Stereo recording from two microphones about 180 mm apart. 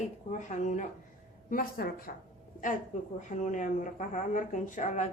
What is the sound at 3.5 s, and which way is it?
Speech, 45° left (ahead or behind).